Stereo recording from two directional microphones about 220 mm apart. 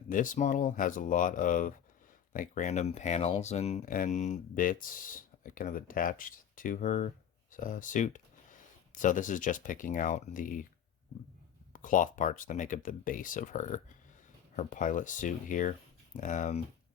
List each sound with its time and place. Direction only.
0.1 s speech: 35° left (ahead or behind)
11.7 s speech: 35° left (ahead or behind)